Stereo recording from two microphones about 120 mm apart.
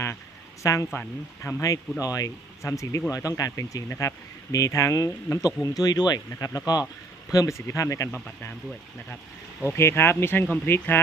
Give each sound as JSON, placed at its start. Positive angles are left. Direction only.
{"t": 0.0, "sound": "a sound", "side_deg": 25}
{"t": 0.9, "sound": "speech", "side_deg": 20}
{"t": 9.1, "sound": "speech", "side_deg": 15}